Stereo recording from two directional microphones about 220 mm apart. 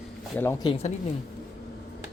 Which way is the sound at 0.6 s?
25° left (ahead or behind).